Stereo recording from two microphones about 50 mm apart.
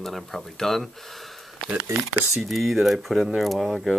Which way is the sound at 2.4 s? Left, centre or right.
Centre.